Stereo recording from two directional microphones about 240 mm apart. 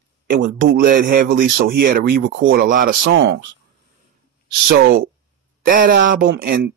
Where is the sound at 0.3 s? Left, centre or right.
Right.